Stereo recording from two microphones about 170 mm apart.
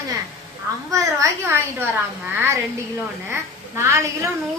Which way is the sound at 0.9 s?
20° right (ahead or behind).